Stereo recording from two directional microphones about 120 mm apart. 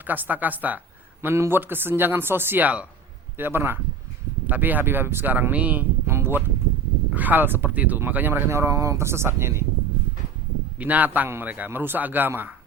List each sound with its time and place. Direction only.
0.1 s speech: 15° right (ahead or behind)
10.8 s speech: 15° right (ahead or behind)